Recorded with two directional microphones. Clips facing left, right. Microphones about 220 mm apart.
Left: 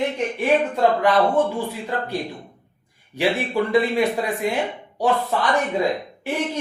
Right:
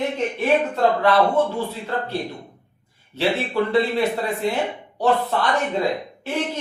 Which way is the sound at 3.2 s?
10° left (ahead or behind).